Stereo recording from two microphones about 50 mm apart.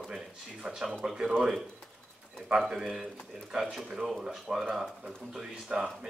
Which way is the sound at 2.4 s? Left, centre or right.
Centre.